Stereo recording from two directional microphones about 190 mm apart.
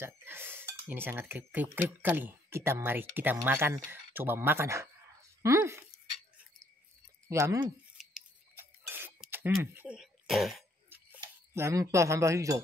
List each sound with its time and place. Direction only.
0.0 s cutlery: 10° right (ahead or behind)
5.4 s dog: 15° right (ahead or behind)
7.2 s cutlery: 15° right (ahead or behind)
8.0 s a sound: 5° right (ahead or behind)
11.1 s speech: 15° right (ahead or behind)